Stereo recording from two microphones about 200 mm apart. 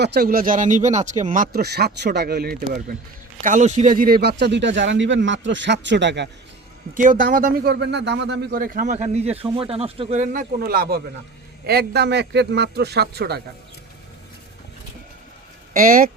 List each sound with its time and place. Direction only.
0.0 s speech: 50° right (ahead or behind)
3.4 s speech: 35° right (ahead or behind); by 6.2 s 60° right (ahead or behind)
6.9 s speech: 40° right (ahead or behind)
10.6 s speech: 50° right (ahead or behind)
15.7 s speech: 45° right (ahead or behind)